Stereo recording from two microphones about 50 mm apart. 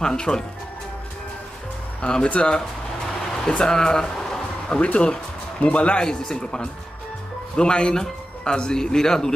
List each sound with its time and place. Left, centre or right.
0.0 s speech: centre
2.0 s speech: centre
3.3 s a sound: centre
4.7 s speech: left
5.9 s speech: centre